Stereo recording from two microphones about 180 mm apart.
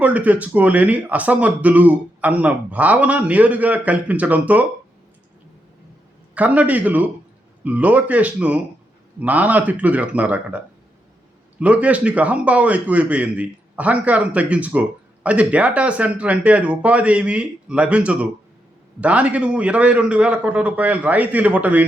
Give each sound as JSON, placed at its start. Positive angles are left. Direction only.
{"t": 0.0, "sound": "a man's voice", "side_deg": -10}
{"t": 6.3, "sound": "a man's voice", "side_deg": -10}
{"t": 11.6, "sound": "a man's voice", "side_deg": -5}